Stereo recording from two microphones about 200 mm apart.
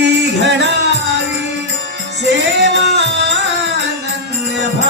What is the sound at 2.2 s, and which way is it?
Music, 60° right (ahead or behind).